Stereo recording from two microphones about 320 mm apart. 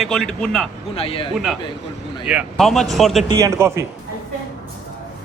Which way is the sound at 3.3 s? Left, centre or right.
Centre.